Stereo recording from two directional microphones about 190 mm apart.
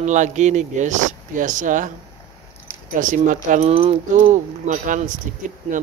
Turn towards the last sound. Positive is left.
turn(degrees=-45)  # may be behind; listen again after turning